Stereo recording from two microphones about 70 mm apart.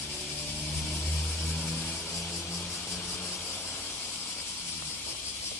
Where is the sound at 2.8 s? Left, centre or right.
Centre.